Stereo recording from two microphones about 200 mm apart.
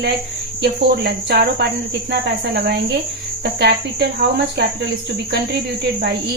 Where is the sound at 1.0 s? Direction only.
55° right (ahead or behind).